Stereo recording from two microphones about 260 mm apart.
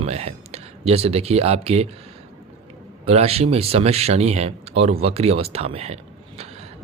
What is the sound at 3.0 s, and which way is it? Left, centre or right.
Speech, right.